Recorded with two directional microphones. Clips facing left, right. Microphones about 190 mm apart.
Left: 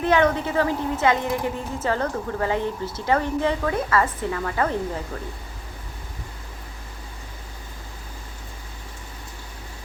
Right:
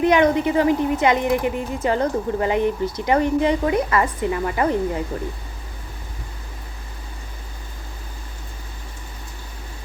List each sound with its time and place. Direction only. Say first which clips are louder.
0.0 s speech: right 4 dB; 15° right (ahead or behind)